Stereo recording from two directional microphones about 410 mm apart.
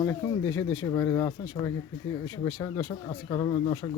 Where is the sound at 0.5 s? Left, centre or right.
Left.